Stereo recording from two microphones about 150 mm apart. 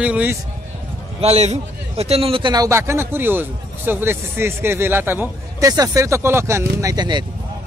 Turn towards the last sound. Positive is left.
turn(degrees=-30)  # may be behind; listen again after turning